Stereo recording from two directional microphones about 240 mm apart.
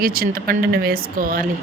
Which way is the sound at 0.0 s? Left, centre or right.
Right.